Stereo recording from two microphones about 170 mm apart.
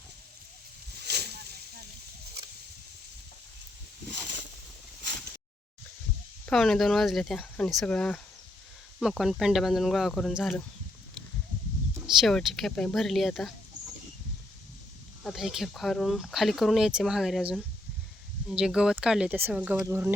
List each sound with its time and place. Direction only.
1.0 s a sound: 75° right (ahead or behind)
6.4 s speech: centre (ahead or behind)
12.0 s speech: centre (ahead or behind)
15.2 s speech: centre (ahead or behind)